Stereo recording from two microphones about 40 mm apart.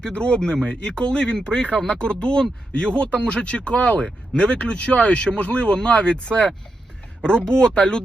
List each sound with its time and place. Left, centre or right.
0.1 s speech: left